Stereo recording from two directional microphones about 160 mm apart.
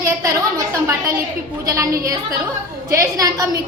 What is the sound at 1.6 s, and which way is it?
A woman's voice, 20° right (ahead or behind).